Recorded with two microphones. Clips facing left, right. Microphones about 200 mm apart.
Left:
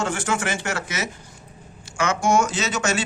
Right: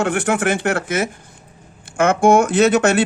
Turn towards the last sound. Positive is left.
turn(degrees=-60)  # may be behind; listen again after turning